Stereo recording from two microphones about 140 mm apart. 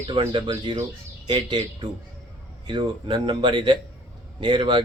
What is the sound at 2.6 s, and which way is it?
A man's voice, 35° right (ahead or behind).